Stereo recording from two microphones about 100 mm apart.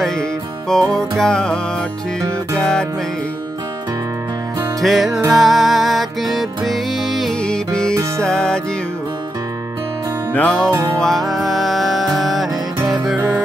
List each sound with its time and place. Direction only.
0.7 s music: 5° left (ahead or behind)
2.6 s music: 5° left (ahead or behind)
4.8 s music: centre (ahead or behind)
10.3 s music: 10° left (ahead or behind)
10.7 s music: 30° right (ahead or behind)
11.0 s music: centre (ahead or behind)